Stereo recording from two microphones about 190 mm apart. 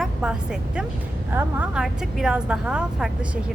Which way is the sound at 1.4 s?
10° right (ahead or behind).